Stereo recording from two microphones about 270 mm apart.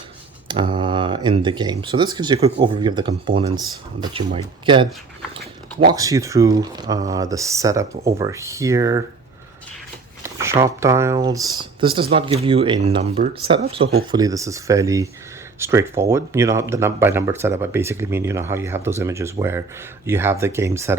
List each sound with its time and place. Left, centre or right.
0.4 s speech: centre
5.9 s speech: centre
10.2 s speech: centre